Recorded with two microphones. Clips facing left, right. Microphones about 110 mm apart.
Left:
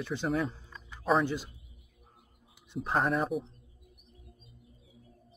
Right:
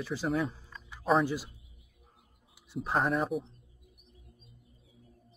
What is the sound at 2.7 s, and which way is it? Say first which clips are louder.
Speech: even; centre (ahead or behind).